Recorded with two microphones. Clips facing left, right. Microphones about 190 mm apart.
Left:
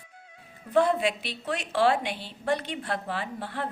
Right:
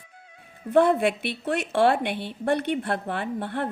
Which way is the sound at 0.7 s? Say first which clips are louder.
Right 4 dB; 55° right (ahead or behind).